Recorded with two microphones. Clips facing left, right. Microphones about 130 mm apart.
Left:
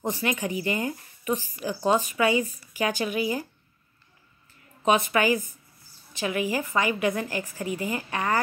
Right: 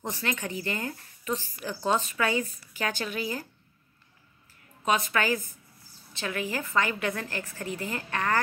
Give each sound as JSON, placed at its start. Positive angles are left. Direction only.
{"t": 0.0, "sound": "speech", "side_deg": 15}
{"t": 4.8, "sound": "speech", "side_deg": 20}